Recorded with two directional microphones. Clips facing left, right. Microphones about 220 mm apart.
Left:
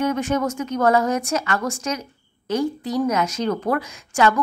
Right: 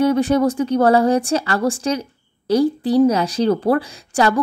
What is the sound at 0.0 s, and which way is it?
Speech, 35° right (ahead or behind).